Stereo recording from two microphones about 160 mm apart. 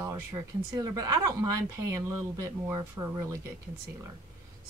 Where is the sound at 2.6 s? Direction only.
15° right (ahead or behind).